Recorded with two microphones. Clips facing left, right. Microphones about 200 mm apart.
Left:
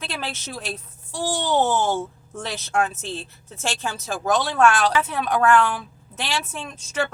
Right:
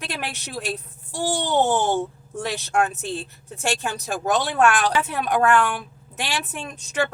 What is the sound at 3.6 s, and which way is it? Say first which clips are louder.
Speech: right 2 dB; 15° right (ahead or behind).